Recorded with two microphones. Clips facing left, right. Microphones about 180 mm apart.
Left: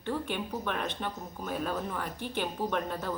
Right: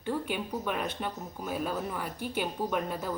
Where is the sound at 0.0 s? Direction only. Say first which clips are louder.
Right 1 dB; 10° right (ahead or behind).